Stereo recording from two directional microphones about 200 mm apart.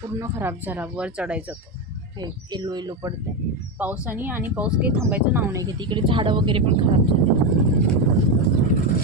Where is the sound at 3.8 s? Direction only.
10° right (ahead or behind); by 6.7 s 25° right (ahead or behind).